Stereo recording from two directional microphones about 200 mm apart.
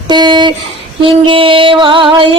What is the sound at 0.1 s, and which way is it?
Music, 20° right (ahead or behind).